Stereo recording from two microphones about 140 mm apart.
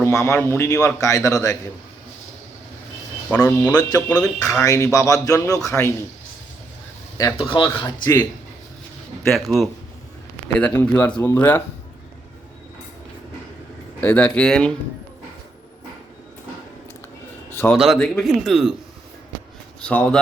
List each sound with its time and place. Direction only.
0.0 s speech: 20° left (ahead or behind)
3.4 s speech: 30° left (ahead or behind)
7.3 s speech: 40° left (ahead or behind)
9.2 s speech: centre (ahead or behind)
10.6 s speech: 15° left (ahead or behind)
14.0 s speech: 10° left (ahead or behind)
17.7 s speech: centre (ahead or behind)
19.8 s speech: 10° left (ahead or behind)